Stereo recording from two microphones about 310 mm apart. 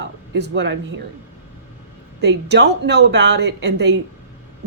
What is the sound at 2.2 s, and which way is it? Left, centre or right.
Speech, right.